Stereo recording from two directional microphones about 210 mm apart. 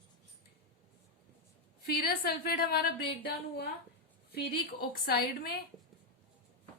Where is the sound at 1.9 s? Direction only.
45° left (ahead or behind).